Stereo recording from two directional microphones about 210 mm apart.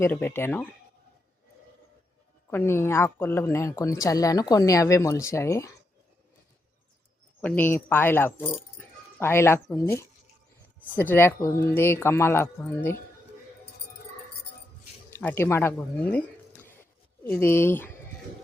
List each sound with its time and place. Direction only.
0.0 s speech: 10° left (ahead or behind)
2.5 s speech: 10° left (ahead or behind)
7.4 s speech: 10° left (ahead or behind)
15.1 s speech: 10° left (ahead or behind)